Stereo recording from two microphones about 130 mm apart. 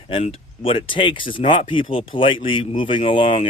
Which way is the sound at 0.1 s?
45° left (ahead or behind).